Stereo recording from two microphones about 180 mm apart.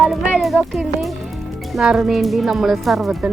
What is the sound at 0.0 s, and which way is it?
Music, centre (ahead or behind).